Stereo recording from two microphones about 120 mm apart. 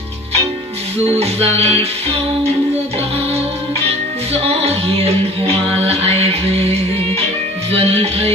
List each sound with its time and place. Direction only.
1.2 s music: 55° right (ahead or behind)
4.3 s music: 55° right (ahead or behind)
7.7 s music: 55° right (ahead or behind)